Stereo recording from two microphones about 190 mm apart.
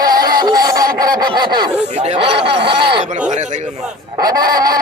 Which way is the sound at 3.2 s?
40° right (ahead or behind).